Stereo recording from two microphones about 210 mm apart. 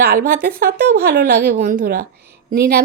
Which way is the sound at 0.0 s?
45° right (ahead or behind).